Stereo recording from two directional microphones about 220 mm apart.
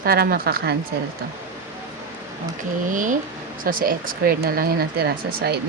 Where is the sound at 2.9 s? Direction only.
35° right (ahead or behind).